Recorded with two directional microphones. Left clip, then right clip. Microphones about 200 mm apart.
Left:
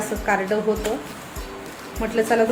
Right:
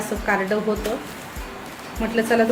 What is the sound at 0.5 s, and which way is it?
Speech, 5° left (ahead or behind).